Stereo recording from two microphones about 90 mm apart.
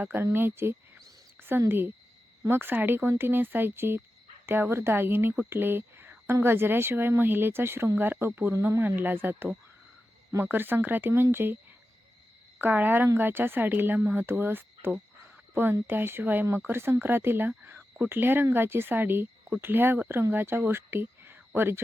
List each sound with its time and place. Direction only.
0.0 s speech: 25° right (ahead or behind)
8.8 s speech: 20° right (ahead or behind)
12.5 s speech: 20° right (ahead or behind)